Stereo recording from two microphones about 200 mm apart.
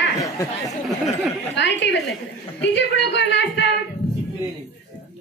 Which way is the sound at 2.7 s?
60° left (ahead or behind).